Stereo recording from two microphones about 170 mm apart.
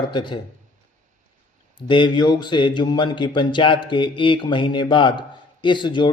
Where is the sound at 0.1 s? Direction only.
25° left (ahead or behind).